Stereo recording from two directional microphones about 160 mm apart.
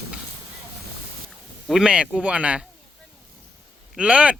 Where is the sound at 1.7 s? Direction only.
5° right (ahead or behind).